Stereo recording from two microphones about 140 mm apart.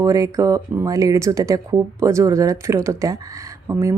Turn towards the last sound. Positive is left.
turn(degrees=-20)  # may be behind; listen again after turning